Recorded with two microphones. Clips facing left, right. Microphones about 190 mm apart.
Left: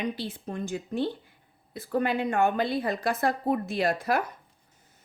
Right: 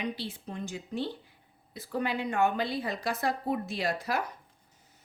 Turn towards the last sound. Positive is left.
turn(degrees=55)  # may be behind; listen again after turning